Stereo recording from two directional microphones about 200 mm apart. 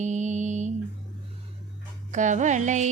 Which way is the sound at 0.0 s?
35° right (ahead or behind).